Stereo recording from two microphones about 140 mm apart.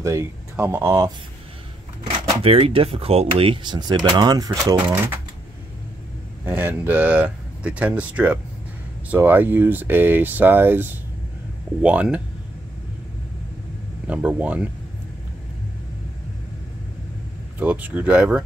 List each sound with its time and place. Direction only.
0.0 s speech: 20° right (ahead or behind)
2.1 s a sound: 30° right (ahead or behind)
2.4 s speech: 40° right (ahead or behind); by 4.7 s 25° right (ahead or behind)
6.4 s speech: 15° right (ahead or behind)
14.0 s speech: 10° right (ahead or behind)
17.6 s speech: 10° right (ahead or behind)